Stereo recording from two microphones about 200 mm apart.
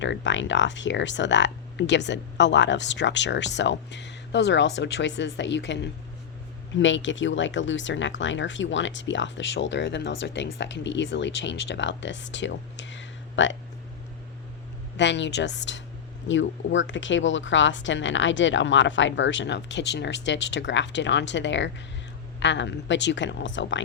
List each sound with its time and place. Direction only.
0.0 s speech: 65° left (ahead or behind)
14.9 s speech: 60° left (ahead or behind)